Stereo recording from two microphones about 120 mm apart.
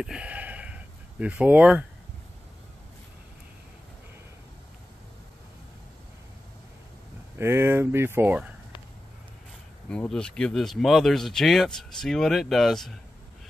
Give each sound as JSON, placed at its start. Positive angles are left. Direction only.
{"t": 0.0, "sound": "a sound", "side_deg": -10}
{"t": 7.3, "sound": "speech", "side_deg": -20}
{"t": 9.8, "sound": "speech", "side_deg": 5}